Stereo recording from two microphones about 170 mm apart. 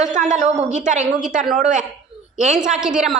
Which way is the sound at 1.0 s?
5° right (ahead or behind).